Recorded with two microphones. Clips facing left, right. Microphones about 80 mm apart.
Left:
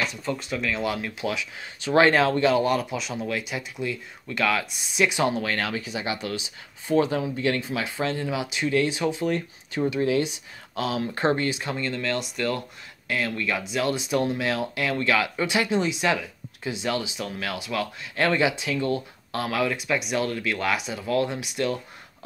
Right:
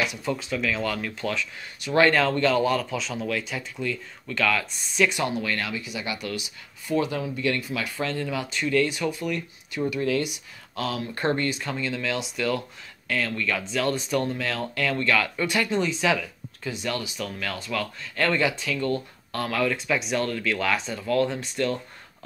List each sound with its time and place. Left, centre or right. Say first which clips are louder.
0.0 s speech: right 1 dB; centre
0.5 s speech: right 1 dB; centre
0.8 s speech: left 1 dB; centre
5.2 s speech: left 3 dB; left
9.3 s speech: left 3 dB; left
9.8 s speech: left 2 dB; left
11.6 s speech: left 1 dB; centre
13.1 s speech: even; centre